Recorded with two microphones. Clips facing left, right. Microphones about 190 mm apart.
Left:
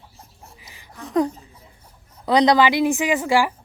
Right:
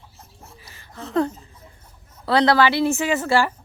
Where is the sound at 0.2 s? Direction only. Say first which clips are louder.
Right 2 dB; 15° left (ahead or behind).